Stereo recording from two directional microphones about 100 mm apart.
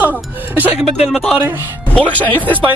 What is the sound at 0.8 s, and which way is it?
Speech, 5° right (ahead or behind).